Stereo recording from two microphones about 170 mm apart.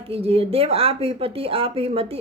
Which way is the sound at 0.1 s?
35° right (ahead or behind).